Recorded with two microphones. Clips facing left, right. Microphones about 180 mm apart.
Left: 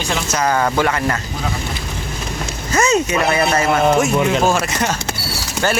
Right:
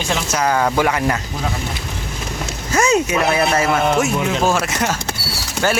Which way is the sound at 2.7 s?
10° right (ahead or behind).